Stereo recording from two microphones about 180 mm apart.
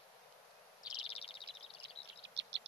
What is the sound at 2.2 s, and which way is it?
Bird, 80° right.